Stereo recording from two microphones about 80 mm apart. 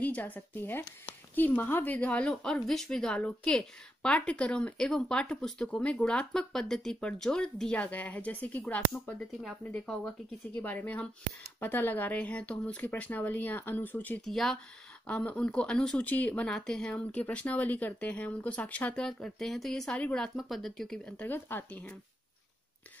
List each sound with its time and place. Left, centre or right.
0.0 s a woman's voice: centre
14.2 s speech: centre
15.0 s speech: centre
20.3 s speech: centre
21.2 s speech: left